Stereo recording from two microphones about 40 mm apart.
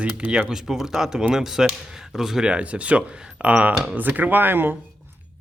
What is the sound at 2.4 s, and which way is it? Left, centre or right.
Speech, right.